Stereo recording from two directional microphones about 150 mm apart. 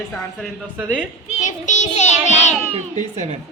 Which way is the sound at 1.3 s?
55° left (ahead or behind).